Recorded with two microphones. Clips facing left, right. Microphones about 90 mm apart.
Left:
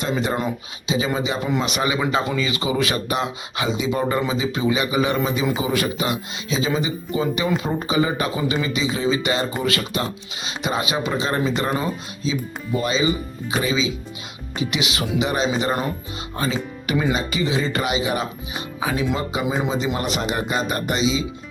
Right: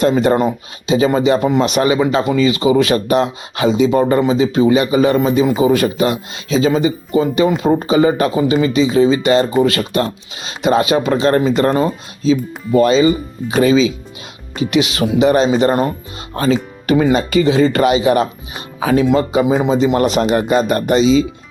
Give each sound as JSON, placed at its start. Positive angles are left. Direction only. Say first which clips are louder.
{"t": 0.0, "sound": "speech", "louder": "right 10 dB", "side_deg": -50}
{"t": 2.0, "sound": "speech", "louder": "right 8 dB", "side_deg": -35}
{"t": 2.7, "sound": "speech", "louder": "right 9 dB", "side_deg": -45}
{"t": 9.6, "sound": "speech", "louder": "right 9 dB", "side_deg": -30}
{"t": 9.9, "sound": "speech", "louder": "right 8 dB", "side_deg": -50}
{"t": 14.7, "sound": "speech", "louder": "right 11 dB", "side_deg": -45}
{"t": 17.0, "sound": "speech", "louder": "right 9 dB", "side_deg": -55}